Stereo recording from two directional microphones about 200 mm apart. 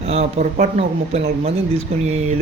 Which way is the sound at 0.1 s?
35° right (ahead or behind).